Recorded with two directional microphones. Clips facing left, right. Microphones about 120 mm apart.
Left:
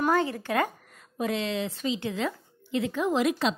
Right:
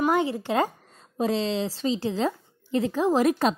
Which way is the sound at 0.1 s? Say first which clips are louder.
Right 2 dB; 20° right (ahead or behind).